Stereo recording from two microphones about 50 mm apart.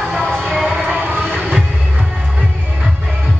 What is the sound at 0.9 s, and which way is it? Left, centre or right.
Vehicle, right.